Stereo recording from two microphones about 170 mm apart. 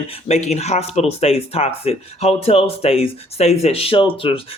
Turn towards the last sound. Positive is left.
turn(degrees=30)  # may be behind; listen again after turning